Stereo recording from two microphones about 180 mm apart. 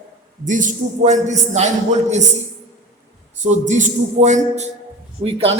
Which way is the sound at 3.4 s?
40° right (ahead or behind).